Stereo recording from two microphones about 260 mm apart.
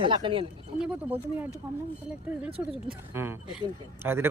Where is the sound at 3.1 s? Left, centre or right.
Centre.